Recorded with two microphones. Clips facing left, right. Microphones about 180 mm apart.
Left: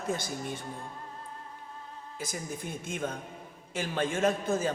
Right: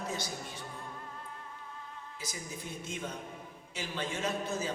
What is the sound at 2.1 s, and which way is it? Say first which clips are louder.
A man's voice: left 7 dB; 50° left (ahead or behind).